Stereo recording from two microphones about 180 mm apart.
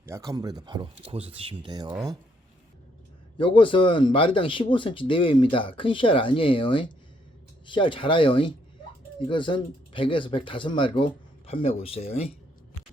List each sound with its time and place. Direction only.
0.1 s speech: 20° right (ahead or behind)
3.3 s speech: 30° left (ahead or behind)